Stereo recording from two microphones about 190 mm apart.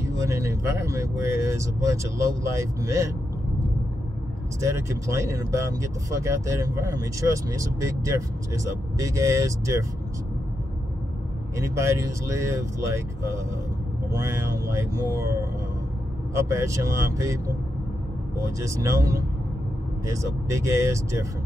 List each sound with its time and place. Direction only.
0.2 s speech: 15° right (ahead or behind)
4.6 s speech: 15° right (ahead or behind)
11.5 s speech: 15° right (ahead or behind)
16.3 s speech: 15° right (ahead or behind)
18.6 s speech: 15° right (ahead or behind)